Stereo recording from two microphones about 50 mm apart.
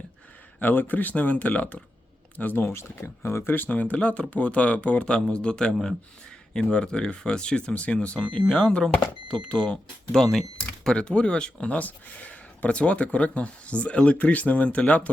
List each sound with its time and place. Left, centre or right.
0.6 s speech: left
2.6 s speech: left
3.5 s speech: left